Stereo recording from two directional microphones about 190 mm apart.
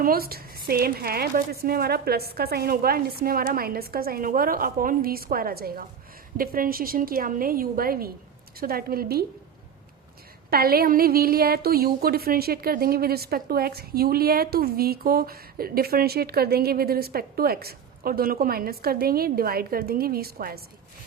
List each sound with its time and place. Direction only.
0.0 s a woman's voice: 50° right (ahead or behind)
10.5 s a woman's voice: 55° right (ahead or behind)